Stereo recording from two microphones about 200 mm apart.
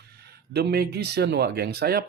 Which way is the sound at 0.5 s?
55° right (ahead or behind).